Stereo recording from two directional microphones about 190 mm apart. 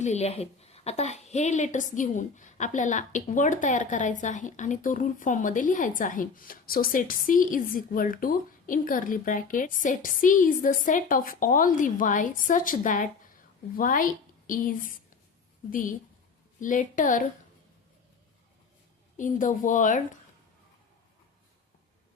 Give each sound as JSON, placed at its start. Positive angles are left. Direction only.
{"t": 0.0, "sound": "a woman's voice", "side_deg": 35}
{"t": 19.1, "sound": "a woman's voice", "side_deg": 40}